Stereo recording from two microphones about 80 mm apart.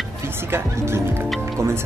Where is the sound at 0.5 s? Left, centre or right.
Right.